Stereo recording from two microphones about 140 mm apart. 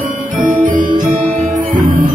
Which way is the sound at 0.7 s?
70° right (ahead or behind).